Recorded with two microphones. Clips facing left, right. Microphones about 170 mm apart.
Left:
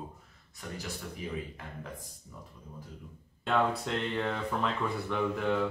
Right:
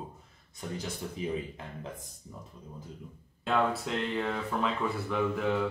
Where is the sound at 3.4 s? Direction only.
Centre (ahead or behind).